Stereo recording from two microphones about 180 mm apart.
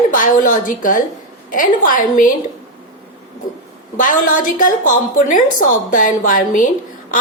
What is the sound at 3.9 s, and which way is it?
A woman's voice, 50° left (ahead or behind).